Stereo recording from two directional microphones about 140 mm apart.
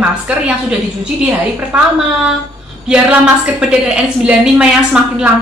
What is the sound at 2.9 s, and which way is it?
A woman's voice, 5° right (ahead or behind).